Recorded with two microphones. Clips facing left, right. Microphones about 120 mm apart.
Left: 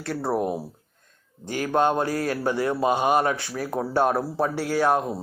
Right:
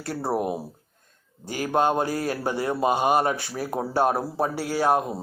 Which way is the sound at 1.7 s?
10° right (ahead or behind).